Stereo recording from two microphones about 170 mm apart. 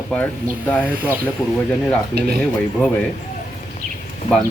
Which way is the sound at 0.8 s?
10° right (ahead or behind).